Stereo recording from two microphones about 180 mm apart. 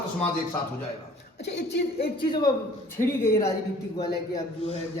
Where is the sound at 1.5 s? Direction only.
70° left (ahead or behind).